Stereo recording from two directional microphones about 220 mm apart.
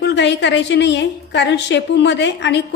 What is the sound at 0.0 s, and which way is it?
A woman's voice, 55° left (ahead or behind).